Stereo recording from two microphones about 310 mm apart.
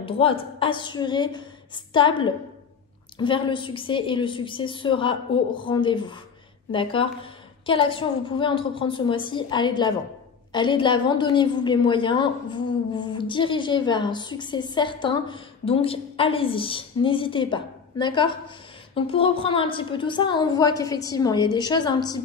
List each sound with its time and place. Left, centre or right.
0.0 s a woman's voice: centre